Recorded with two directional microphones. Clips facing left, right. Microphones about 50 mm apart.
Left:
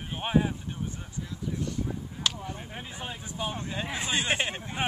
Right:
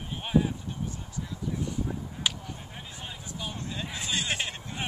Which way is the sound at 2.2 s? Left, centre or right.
Centre.